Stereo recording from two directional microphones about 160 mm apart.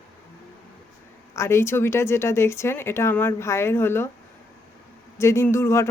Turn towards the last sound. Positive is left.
turn(degrees=15)  # may be behind; listen again after turning